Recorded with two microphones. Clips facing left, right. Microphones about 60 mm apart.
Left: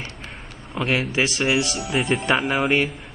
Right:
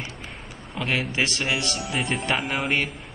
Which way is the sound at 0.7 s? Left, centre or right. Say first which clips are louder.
Left 3 dB; centre.